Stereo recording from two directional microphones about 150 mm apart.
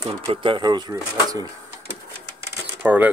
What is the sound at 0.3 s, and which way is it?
Speech, 35° right (ahead or behind).